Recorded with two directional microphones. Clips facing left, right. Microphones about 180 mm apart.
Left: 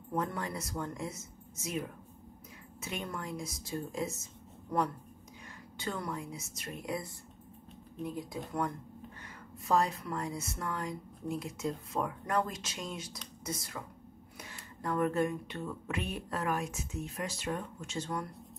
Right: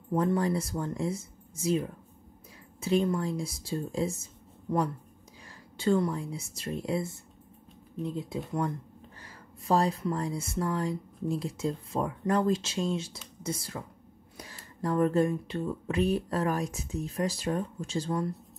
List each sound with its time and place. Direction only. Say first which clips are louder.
0.1 s speech: right 9 dB; 30° right (ahead or behind)